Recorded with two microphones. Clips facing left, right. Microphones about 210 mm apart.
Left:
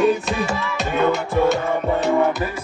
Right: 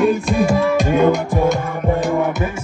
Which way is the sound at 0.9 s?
15° right (ahead or behind).